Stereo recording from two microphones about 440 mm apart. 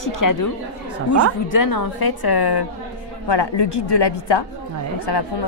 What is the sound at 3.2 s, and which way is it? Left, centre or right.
A woman's voice, left.